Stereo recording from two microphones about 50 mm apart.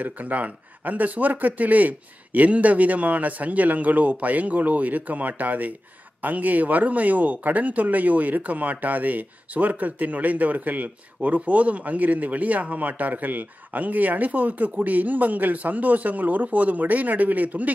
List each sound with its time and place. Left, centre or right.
0.0 s a man's voice: right